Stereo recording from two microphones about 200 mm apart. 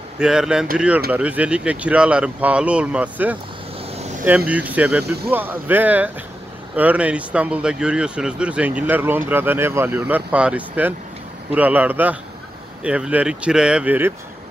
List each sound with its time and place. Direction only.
0.2 s speech: 5° right (ahead or behind)
3.9 s vehicle: 35° right (ahead or behind)
4.5 s speech: 10° right (ahead or behind)